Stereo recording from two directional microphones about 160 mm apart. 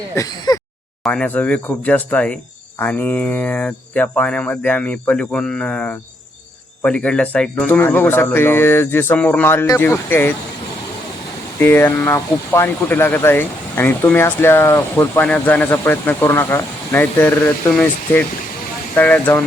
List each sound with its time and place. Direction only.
0.2 s speech: 20° left (ahead or behind)
1.0 s speech: 5° left (ahead or behind)
11.6 s speech: 15° left (ahead or behind)